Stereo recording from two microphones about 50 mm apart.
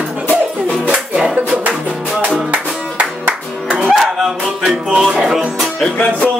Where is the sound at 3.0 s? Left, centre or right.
Right.